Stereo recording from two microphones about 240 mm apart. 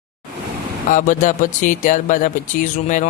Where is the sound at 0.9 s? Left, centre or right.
Left.